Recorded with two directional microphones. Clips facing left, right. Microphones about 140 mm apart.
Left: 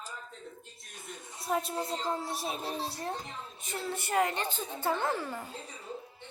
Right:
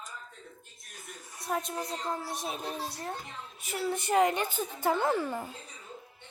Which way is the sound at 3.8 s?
20° right (ahead or behind).